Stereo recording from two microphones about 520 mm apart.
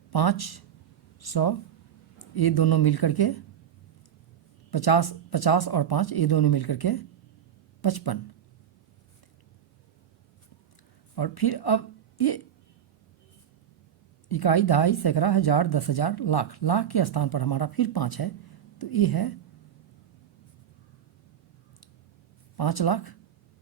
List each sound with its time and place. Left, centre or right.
0.1 s speech: left
4.7 s speech: left
11.1 s speech: left
14.3 s speech: left
22.5 s speech: left